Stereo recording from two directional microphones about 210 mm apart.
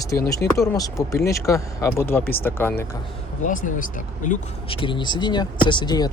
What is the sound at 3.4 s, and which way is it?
Speech, 40° left (ahead or behind).